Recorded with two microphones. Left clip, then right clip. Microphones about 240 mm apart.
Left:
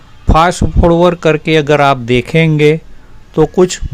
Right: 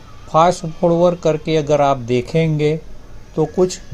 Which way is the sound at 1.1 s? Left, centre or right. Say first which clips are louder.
Left 6 dB; left.